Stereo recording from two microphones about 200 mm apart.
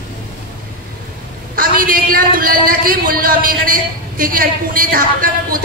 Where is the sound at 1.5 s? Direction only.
45° right (ahead or behind).